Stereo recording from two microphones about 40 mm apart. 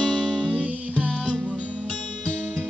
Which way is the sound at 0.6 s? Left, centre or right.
Right.